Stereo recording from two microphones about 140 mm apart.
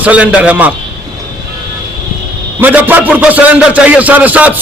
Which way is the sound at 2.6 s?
10° right (ahead or behind).